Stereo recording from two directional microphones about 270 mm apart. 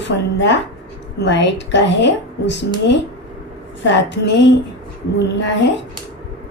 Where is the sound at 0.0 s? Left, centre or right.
Left.